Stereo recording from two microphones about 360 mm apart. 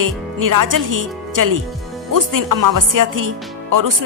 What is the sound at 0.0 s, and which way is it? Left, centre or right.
A woman's voice, right.